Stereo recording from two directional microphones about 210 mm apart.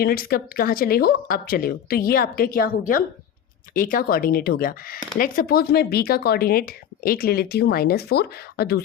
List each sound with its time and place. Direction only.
0.0 s speech: 45° left (ahead or behind)